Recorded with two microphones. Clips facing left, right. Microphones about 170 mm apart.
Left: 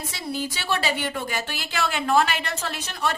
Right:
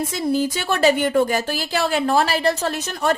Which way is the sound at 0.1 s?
45° right (ahead or behind).